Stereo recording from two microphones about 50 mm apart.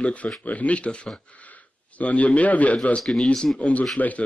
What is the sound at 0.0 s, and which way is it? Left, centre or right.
A man's voice, left.